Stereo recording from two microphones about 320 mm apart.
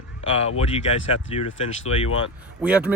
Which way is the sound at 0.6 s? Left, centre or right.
Centre.